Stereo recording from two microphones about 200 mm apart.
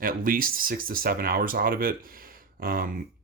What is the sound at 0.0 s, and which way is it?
Speech, 45° right (ahead or behind).